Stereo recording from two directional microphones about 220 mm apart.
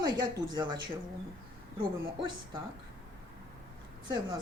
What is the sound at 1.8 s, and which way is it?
Speech, 20° right (ahead or behind).